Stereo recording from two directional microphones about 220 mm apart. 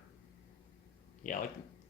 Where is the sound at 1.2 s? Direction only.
35° left (ahead or behind).